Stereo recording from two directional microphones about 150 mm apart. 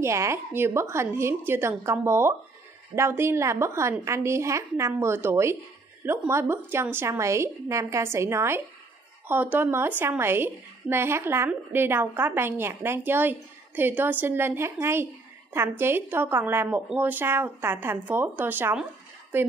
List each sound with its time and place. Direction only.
0.0 s a woman's voice: 20° right (ahead or behind)